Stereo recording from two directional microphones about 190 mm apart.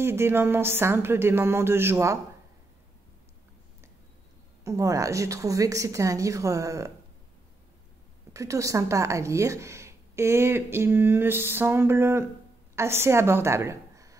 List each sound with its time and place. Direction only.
0.0 s speech: 15° right (ahead or behind)
4.6 s speech: 15° right (ahead or behind)
8.3 s a woman's voice: 15° right (ahead or behind)